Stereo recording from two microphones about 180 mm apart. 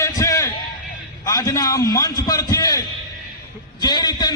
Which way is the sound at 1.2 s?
20° left (ahead or behind).